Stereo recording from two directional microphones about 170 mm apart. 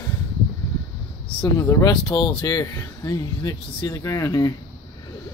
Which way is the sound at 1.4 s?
20° left (ahead or behind).